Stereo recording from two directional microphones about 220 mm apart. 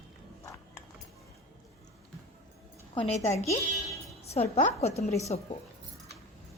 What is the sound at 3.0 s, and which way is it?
Speech, 25° left (ahead or behind).